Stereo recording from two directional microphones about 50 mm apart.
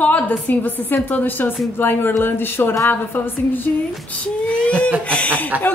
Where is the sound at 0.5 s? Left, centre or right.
Left.